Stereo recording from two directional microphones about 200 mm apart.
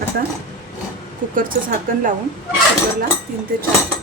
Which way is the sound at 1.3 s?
45° right (ahead or behind).